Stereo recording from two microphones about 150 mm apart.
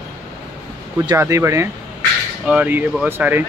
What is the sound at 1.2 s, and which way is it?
Speech, 20° right (ahead or behind).